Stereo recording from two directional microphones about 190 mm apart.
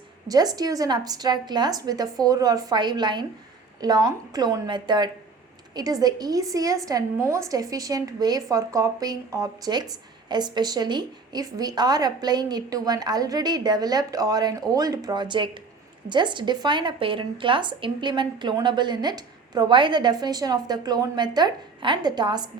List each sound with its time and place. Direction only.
0.3 s a woman's voice: 20° right (ahead or behind)